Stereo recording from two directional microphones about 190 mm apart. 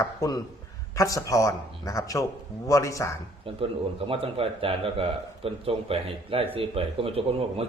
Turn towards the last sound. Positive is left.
turn(degrees=-30)  # may be behind; listen again after turning